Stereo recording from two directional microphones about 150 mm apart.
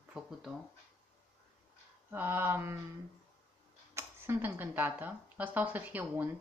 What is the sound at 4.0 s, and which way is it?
Speech, 15° right (ahead or behind).